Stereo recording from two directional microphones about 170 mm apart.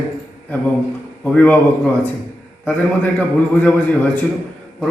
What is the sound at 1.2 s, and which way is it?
A man's voice, 10° left (ahead or behind).